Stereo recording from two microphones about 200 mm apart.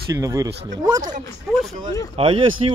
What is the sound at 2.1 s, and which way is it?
Speech, 25° right (ahead or behind).